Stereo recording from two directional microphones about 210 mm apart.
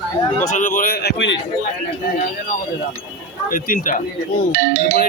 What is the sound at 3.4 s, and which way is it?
Speech, 40° left (ahead or behind).